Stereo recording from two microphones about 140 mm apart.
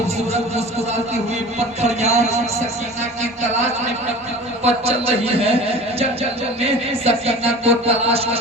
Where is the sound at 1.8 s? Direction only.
50° right (ahead or behind).